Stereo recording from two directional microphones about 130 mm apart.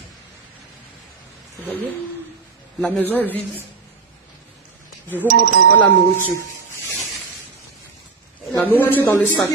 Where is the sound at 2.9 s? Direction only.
15° left (ahead or behind).